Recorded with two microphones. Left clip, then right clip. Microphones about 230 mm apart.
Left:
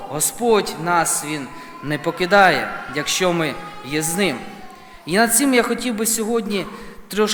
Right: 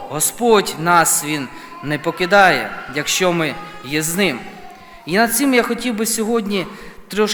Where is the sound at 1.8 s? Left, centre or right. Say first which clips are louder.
Right 2 dB; centre.